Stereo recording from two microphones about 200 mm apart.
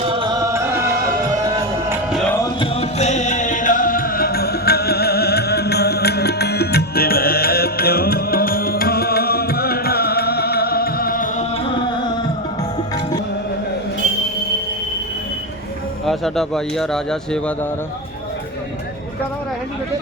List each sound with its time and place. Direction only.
0.0 s music: 25° right (ahead or behind)
1.9 s music: 5° right (ahead or behind)
2.2 s music: 10° left (ahead or behind)
2.6 s music: 30° left (ahead or behind)
16.0 s speech: centre (ahead or behind)